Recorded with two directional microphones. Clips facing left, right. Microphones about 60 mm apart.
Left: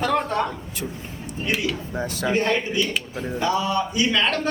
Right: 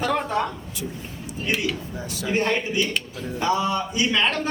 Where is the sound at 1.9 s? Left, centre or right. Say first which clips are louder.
Left 4 dB; left.